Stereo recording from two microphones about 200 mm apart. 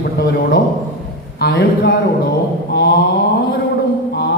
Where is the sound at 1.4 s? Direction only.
55° left (ahead or behind).